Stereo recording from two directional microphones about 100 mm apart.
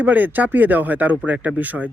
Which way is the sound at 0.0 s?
15° right (ahead or behind).